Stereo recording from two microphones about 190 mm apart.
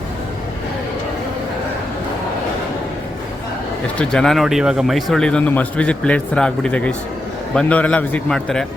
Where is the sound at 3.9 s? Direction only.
5° left (ahead or behind).